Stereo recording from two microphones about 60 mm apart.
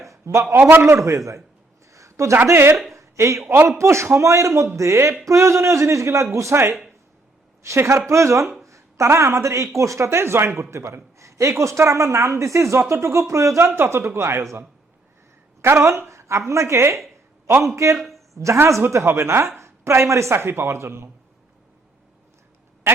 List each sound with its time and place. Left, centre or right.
0.0 s a sound: right
0.5 s a man's voice: right
0.9 s speech: right
1.9 s a sound: right
2.5 s speech: right
2.9 s a sound: right
3.4 s a man's voice: right
3.7 s speech: right
13.7 s speech: right
15.6 s speech: right